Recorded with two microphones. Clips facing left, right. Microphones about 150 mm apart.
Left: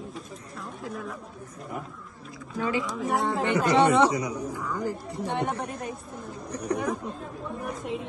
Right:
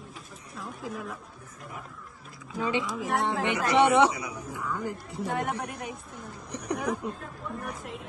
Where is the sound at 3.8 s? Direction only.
15° right (ahead or behind).